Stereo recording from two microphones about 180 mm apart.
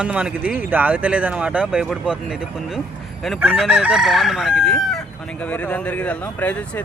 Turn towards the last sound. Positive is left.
turn(degrees=10)  # may be behind; listen again after turning